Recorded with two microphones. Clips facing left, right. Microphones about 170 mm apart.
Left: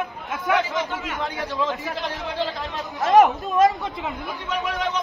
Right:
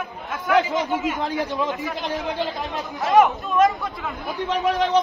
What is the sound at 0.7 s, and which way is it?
Speech, 20° right (ahead or behind).